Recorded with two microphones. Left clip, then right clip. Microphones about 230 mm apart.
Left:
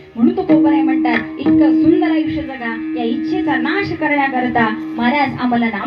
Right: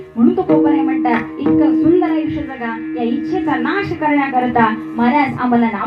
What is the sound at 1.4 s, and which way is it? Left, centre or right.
Speech, left.